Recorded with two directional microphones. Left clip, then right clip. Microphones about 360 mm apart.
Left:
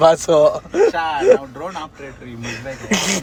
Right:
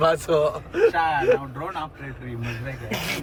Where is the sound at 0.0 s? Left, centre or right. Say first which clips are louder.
Left 8 dB; centre.